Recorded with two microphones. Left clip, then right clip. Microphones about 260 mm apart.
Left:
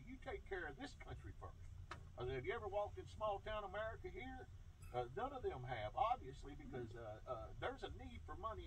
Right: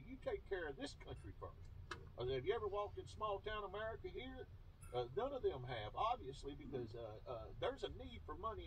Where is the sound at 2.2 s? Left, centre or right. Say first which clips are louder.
Right 4 dB; left.